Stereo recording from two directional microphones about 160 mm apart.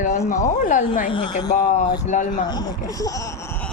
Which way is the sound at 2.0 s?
50° left (ahead or behind).